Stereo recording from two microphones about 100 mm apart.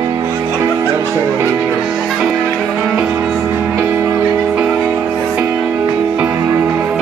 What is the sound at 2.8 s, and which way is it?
Music, 15° right (ahead or behind).